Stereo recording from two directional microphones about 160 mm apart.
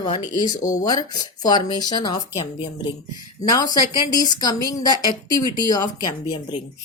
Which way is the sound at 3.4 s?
25° left (ahead or behind).